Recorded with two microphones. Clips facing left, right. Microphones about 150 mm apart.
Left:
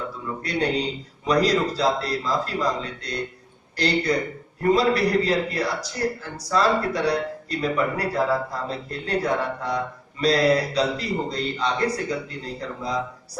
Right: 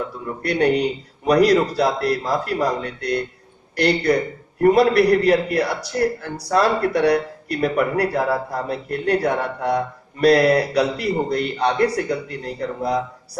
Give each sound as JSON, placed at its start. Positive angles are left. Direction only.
{"t": 0.4, "sound": "speech", "side_deg": -65}